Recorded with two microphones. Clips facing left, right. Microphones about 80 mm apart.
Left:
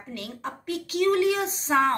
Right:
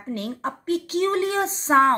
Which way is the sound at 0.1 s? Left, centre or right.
Right.